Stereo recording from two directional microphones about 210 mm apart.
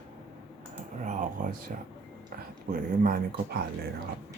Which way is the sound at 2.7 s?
45° right (ahead or behind).